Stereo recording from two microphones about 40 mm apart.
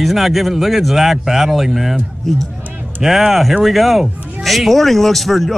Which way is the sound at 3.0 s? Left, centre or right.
Centre.